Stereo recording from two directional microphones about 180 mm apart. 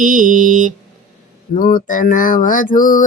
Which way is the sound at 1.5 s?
50° left (ahead or behind).